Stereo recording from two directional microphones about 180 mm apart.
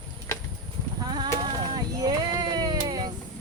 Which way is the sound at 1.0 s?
25° right (ahead or behind).